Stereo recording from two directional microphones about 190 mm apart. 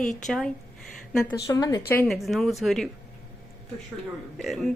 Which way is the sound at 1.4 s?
15° left (ahead or behind).